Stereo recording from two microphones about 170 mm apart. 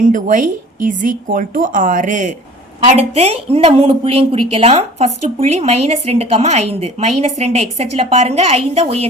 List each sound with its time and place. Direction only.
0.0 s a woman's voice: 50° right (ahead or behind)